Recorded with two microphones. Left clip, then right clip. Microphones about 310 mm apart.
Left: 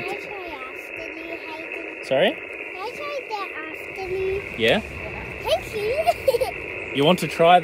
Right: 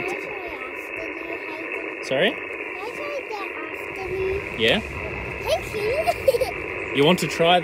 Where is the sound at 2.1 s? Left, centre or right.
Centre.